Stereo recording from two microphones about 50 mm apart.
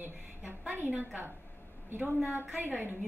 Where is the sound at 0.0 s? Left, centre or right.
Right.